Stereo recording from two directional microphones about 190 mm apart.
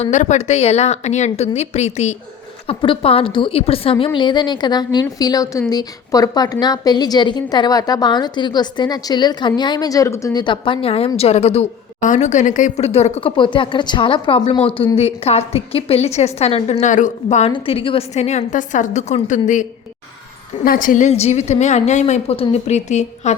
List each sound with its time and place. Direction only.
0.0 s a woman's voice: 40° left (ahead or behind)
20.7 s a woman's voice: 45° left (ahead or behind)